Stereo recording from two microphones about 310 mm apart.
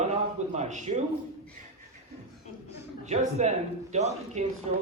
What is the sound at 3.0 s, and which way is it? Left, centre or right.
A man's voice, right.